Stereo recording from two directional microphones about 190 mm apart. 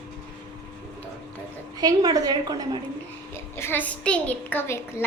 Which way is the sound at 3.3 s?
10° left (ahead or behind).